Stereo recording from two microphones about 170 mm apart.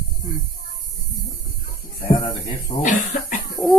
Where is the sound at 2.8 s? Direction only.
50° left (ahead or behind).